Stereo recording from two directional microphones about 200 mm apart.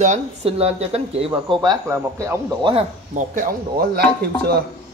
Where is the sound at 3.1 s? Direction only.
40° right (ahead or behind).